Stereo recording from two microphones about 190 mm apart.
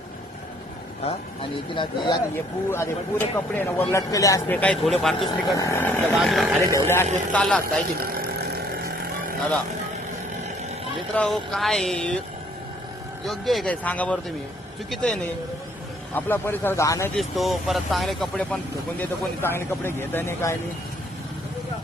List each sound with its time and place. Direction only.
1.0 s speech: 25° left (ahead or behind)
2.6 s speech: 15° left (ahead or behind)
5.5 s speech: 15° left (ahead or behind)
6.1 s speech: centre (ahead or behind)
6.7 s speech: 15° left (ahead or behind)
7.6 s vehicle: 50° right (ahead or behind)
11.1 s speech: 5° left (ahead or behind)
13.2 s speech: centre (ahead or behind); by 17.1 s 15° left (ahead or behind)
17.2 s speech: centre (ahead or behind)